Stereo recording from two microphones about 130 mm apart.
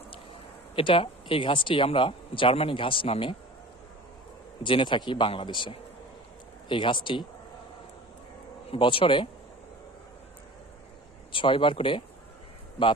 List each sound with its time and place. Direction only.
0.8 s speech: 45° left (ahead or behind)
4.6 s speech: 40° left (ahead or behind)
8.7 s speech: 45° left (ahead or behind)
11.3 s speech: 40° left (ahead or behind)